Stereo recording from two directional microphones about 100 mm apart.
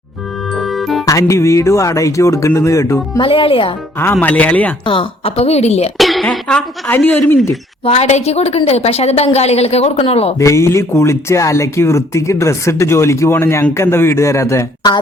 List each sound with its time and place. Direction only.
0.5 s music: centre (ahead or behind)
1.0 s speech: 30° left (ahead or behind)
3.2 s speech: 65° left (ahead or behind)
3.9 s speech: 20° left (ahead or behind)
4.9 s a woman's voice: 70° left (ahead or behind); by 5.9 s 90° left
6.0 s a sound: centre (ahead or behind)
6.3 s speech: 10° left (ahead or behind)
7.9 s a woman's voice: 90° left
10.3 s speech: 30° left (ahead or behind)